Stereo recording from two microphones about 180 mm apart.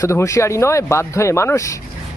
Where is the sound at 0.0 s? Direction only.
15° left (ahead or behind).